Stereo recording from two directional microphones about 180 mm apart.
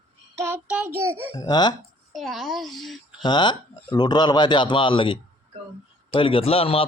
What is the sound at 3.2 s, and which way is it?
A man's voice, 25° left (ahead or behind).